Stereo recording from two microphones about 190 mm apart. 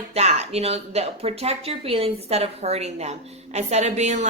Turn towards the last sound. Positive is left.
turn(degrees=-35)  # may be behind; listen again after turning